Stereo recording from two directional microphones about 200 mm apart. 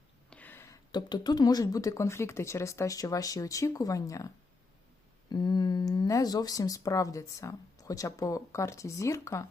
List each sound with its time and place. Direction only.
0.3 s speech: 10° left (ahead or behind)
5.3 s speech: 20° left (ahead or behind)